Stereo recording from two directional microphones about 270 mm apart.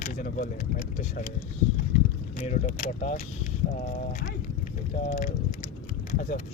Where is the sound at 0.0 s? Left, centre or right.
Left.